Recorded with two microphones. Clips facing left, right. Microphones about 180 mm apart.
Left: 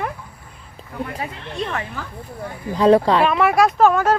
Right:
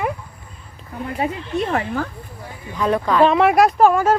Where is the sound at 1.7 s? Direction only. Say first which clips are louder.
Right 7 dB; 50° right (ahead or behind).